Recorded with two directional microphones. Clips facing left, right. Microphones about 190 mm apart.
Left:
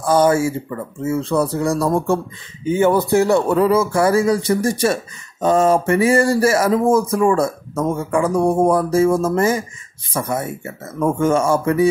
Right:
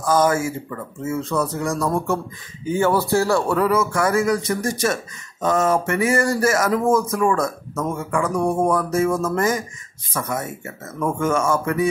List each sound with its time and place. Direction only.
0.0 s speech: 30° left (ahead or behind)